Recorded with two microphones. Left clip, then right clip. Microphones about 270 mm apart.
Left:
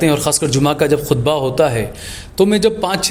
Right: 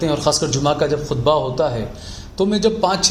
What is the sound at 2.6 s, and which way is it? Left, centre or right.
Speech, left.